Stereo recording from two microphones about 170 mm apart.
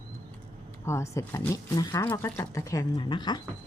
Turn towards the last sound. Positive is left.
turn(degrees=25)  # may be behind; listen again after turning